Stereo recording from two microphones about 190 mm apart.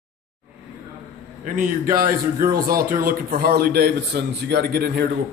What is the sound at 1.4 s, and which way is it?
A man's voice, 45° right (ahead or behind).